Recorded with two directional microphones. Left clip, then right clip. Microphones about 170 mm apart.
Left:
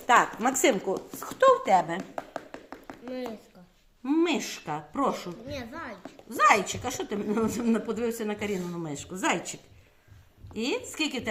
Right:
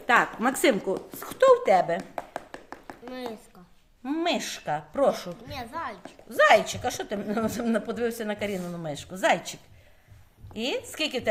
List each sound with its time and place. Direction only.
0.1 s speech: 10° right (ahead or behind)
1.2 s a sound: 15° right (ahead or behind)
4.0 s a woman's voice: 20° right (ahead or behind)
5.5 s a woman's voice: 90° right
6.3 s a woman's voice: 20° right (ahead or behind)